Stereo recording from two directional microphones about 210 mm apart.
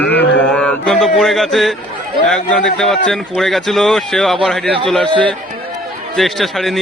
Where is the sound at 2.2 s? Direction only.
5° left (ahead or behind).